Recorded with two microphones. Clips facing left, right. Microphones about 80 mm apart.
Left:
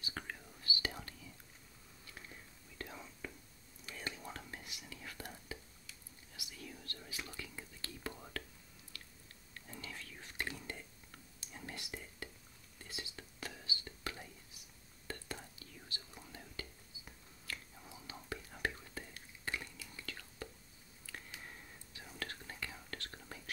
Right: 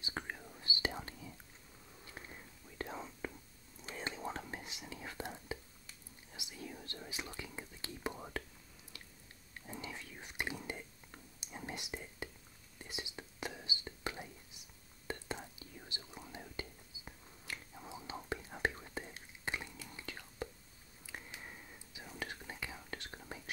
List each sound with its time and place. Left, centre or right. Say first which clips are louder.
0.0 s whispering: right 3 dB; right
9.5 s whispering: right 4 dB; centre